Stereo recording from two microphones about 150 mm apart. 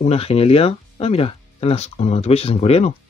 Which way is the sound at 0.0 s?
40° left (ahead or behind).